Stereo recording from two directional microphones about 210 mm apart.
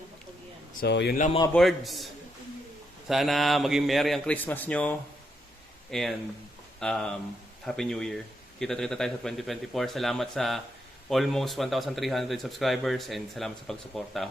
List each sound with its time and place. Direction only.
0.8 s speech: 50° left (ahead or behind)
1.5 s speech: centre (ahead or behind)
3.1 s speech: centre (ahead or behind)